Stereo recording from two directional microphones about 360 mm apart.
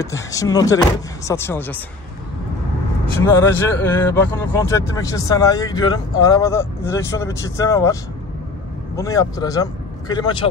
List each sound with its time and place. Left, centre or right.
0.0 s speech: centre
3.2 s speech: centre